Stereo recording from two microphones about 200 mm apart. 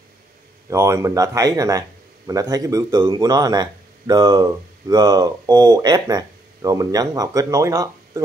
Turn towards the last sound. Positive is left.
turn(degrees=-15)  # may be behind; listen again after turning